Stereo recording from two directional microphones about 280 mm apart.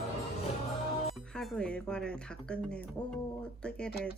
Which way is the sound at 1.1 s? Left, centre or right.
Centre.